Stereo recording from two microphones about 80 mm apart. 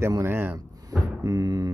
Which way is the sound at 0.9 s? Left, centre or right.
Right.